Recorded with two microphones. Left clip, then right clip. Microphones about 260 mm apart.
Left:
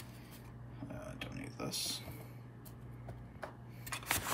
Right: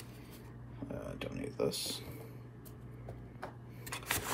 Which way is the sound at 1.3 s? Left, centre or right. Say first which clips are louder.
Right 8 dB; centre.